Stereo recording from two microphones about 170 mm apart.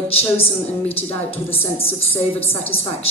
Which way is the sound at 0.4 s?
35° left (ahead or behind).